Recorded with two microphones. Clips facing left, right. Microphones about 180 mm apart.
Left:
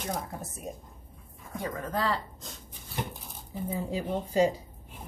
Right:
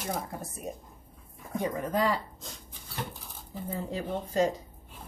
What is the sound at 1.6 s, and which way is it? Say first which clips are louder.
Speech: right 3 dB; 15° right (ahead or behind).